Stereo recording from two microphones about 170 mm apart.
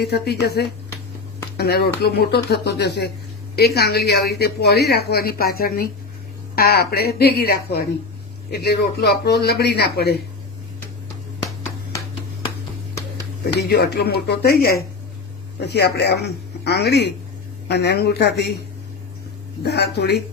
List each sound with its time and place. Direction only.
0.0 s speech: 75° left (ahead or behind)
13.6 s speech: 70° left (ahead or behind)
15.6 s speech: 75° left (ahead or behind)
19.6 s speech: 75° left (ahead or behind)